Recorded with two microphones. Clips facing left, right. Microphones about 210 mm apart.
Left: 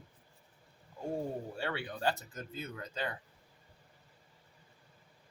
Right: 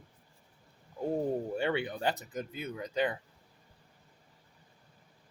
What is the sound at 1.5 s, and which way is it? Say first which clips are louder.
Speech: right 7 dB; 20° right (ahead or behind).